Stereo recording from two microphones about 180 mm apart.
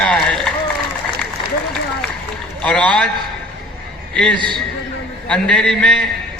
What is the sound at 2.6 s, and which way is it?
Speech, 5° left (ahead or behind).